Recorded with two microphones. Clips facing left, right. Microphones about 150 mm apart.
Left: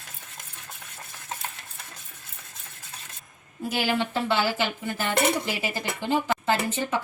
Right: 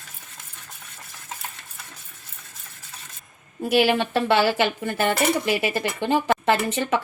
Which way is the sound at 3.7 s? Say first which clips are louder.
Right 7 dB; 65° right (ahead or behind).